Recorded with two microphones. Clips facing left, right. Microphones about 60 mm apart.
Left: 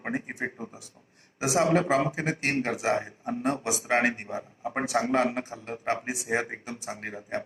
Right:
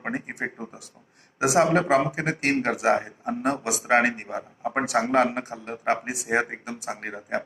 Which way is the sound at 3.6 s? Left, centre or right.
Right.